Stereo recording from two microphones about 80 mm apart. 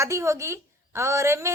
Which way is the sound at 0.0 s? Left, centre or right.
Right.